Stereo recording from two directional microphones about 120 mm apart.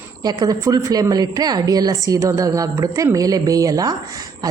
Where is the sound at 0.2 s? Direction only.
35° right (ahead or behind).